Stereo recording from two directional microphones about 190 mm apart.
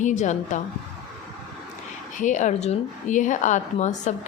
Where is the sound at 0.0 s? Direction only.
40° left (ahead or behind).